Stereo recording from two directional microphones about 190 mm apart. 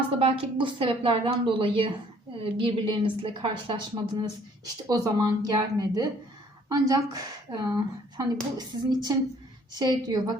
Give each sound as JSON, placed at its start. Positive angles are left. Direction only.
{"t": 0.2, "sound": "speech", "side_deg": -30}